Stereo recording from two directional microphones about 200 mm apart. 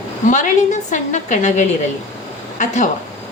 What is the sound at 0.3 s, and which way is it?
A woman's voice, 40° left (ahead or behind).